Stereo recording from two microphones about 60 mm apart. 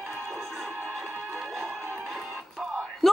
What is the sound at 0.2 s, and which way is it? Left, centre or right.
Music, right.